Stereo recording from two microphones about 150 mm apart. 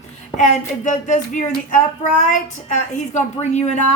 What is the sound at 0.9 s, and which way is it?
A woman's voice, 55° left (ahead or behind).